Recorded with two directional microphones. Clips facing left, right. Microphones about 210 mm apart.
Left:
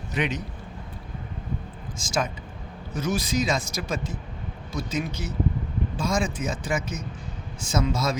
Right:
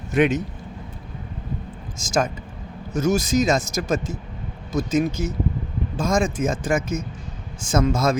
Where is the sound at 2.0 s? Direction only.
45° right (ahead or behind).